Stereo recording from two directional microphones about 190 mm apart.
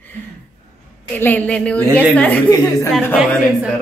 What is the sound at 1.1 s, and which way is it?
Speech, 10° left (ahead or behind).